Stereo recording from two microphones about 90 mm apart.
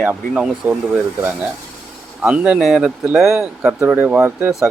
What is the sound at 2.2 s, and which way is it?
Speech, 15° right (ahead or behind).